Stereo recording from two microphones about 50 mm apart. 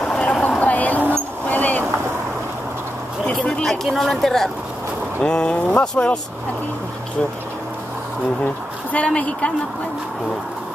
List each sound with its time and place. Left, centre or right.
0.0 s vehicle: left
0.6 s a sound: left
1.1 s vehicle: left
3.3 s a sound: centre
5.2 s speech: centre
8.9 s speech: left